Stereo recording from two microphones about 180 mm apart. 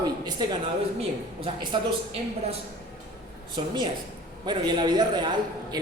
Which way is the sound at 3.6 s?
25° right (ahead or behind).